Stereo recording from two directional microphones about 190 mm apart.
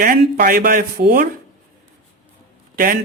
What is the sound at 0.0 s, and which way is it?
A man's voice, 50° right (ahead or behind).